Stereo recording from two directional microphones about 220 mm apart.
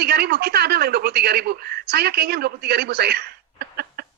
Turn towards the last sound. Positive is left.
turn(degrees=-45)  # may be behind; listen again after turning